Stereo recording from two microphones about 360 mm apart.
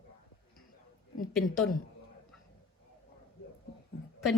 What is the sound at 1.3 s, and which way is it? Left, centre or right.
Speech, centre.